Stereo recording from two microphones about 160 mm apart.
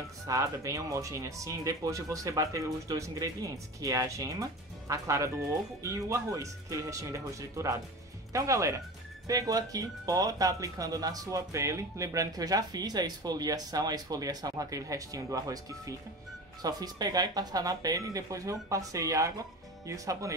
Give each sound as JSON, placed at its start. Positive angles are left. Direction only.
{"t": 0.3, "sound": "speech", "side_deg": -20}